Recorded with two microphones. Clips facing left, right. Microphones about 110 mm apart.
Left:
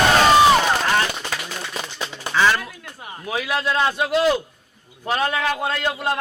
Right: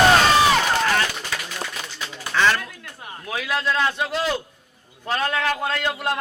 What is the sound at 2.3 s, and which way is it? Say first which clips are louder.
A man's voice: left 1 dB; 10° left (ahead or behind).